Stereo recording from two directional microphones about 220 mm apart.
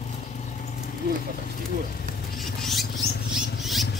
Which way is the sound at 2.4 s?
Centre (ahead or behind).